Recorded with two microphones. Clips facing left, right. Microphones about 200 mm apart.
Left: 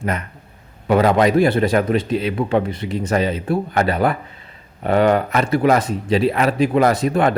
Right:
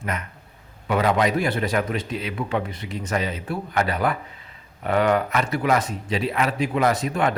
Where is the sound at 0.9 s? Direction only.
35° left (ahead or behind).